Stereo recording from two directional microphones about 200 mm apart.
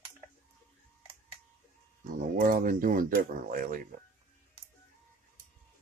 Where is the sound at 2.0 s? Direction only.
45° right (ahead or behind).